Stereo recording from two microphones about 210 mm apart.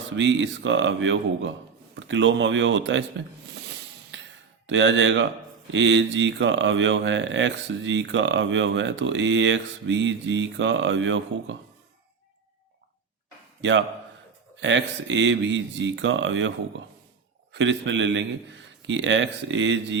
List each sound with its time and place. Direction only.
0.2 s speech: 60° right (ahead or behind)
2.0 s a sound: 60° right (ahead or behind)
4.6 s speech: 60° right (ahead or behind)
13.6 s a man's voice: 60° right (ahead or behind)
17.5 s speech: 60° right (ahead or behind)